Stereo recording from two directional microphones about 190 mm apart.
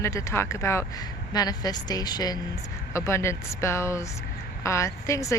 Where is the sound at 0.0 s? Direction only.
15° left (ahead or behind).